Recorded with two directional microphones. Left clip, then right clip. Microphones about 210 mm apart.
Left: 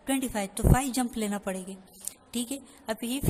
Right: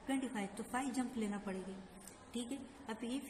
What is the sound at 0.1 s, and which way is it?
A woman's voice, 55° left (ahead or behind).